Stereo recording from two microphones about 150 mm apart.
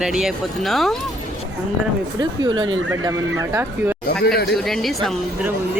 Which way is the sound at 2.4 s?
30° right (ahead or behind).